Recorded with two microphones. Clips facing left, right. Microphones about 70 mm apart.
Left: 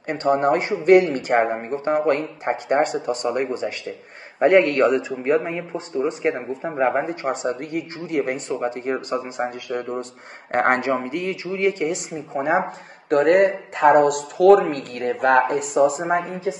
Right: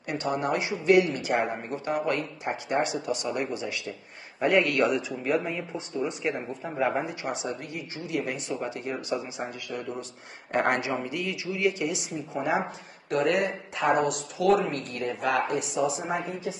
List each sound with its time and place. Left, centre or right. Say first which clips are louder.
0.0 s speech: left 9 dB; left